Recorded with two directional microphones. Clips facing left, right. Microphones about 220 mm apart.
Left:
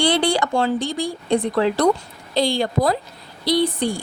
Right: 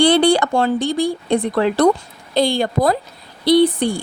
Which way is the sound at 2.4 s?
50° right (ahead or behind).